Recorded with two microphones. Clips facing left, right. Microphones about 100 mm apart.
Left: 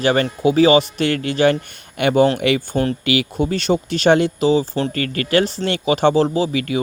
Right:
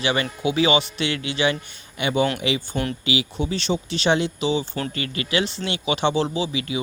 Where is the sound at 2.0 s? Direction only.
60° left (ahead or behind); by 5.0 s 35° left (ahead or behind).